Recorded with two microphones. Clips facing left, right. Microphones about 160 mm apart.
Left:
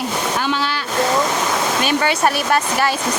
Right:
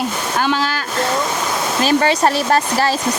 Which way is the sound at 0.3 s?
45° right (ahead or behind).